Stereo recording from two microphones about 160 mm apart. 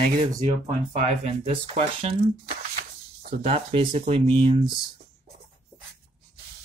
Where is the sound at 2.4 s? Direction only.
65° right (ahead or behind).